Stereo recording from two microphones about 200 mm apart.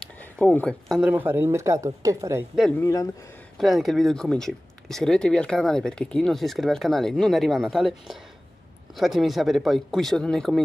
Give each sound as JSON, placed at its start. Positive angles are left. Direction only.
{"t": 0.2, "sound": "speech", "side_deg": 10}
{"t": 2.8, "sound": "speech", "side_deg": 15}
{"t": 3.5, "sound": "speech", "side_deg": 0}